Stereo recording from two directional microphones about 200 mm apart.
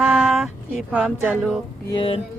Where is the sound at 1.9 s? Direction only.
25° left (ahead or behind).